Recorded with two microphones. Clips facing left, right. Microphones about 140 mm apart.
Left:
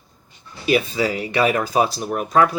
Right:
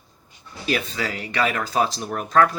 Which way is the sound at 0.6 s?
15° left (ahead or behind).